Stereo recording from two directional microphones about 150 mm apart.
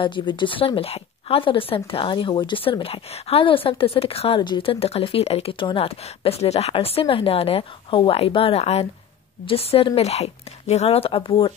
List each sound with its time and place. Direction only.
0.0 s speech: 30° left (ahead or behind)